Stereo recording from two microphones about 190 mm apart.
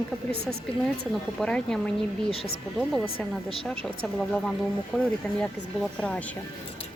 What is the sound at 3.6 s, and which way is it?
Speech, 5° left (ahead or behind).